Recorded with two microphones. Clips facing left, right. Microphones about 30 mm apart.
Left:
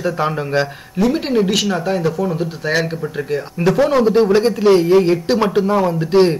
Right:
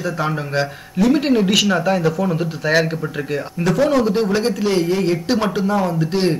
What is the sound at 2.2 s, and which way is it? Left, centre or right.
Speech, centre.